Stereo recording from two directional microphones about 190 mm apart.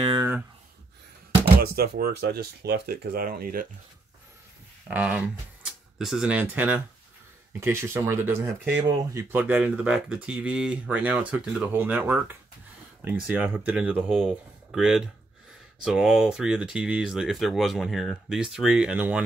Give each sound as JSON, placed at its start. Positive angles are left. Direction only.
{"t": 0.0, "sound": "a sound", "side_deg": -25}
{"t": 1.4, "sound": "speech", "side_deg": -55}
{"t": 4.8, "sound": "speech", "side_deg": -5}